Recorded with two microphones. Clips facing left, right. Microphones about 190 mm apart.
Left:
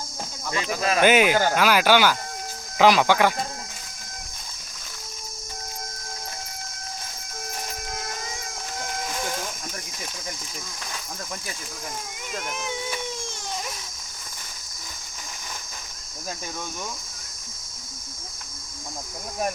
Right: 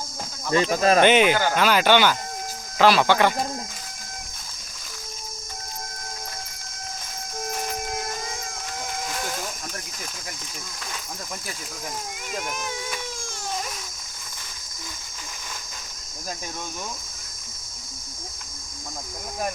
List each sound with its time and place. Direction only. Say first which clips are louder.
0.5 s speech: right 6 dB; 35° right (ahead or behind)
1.0 s speech: right 1 dB; 5° left (ahead or behind)
12.3 s speech: right 1 dB; 15° right (ahead or behind)